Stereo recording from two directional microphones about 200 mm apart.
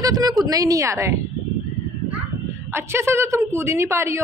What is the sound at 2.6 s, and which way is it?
A woman's voice, 10° right (ahead or behind).